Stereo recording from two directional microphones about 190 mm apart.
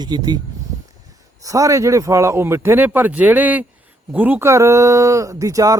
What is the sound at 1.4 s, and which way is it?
Speech, 15° right (ahead or behind).